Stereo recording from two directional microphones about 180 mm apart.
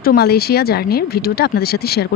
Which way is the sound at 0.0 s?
55° left (ahead or behind).